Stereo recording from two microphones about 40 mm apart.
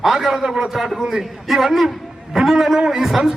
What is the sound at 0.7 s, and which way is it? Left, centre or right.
A man's voice, centre.